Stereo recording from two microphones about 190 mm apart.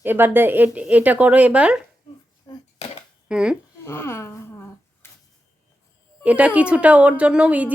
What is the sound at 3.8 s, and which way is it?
Speech, 15° left (ahead or behind).